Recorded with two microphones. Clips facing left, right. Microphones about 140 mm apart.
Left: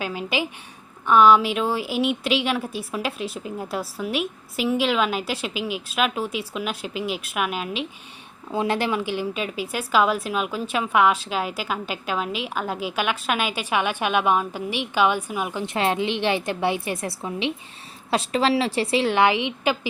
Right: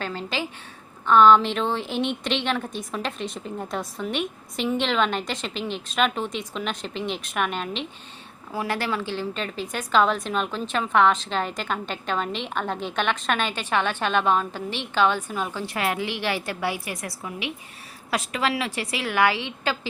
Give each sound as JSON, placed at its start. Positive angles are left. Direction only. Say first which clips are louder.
{"t": 0.0, "sound": "a woman's voice", "louder": "left 3 dB", "side_deg": 10}
{"t": 8.5, "sound": "a woman's voice", "louder": "left 4 dB", "side_deg": 20}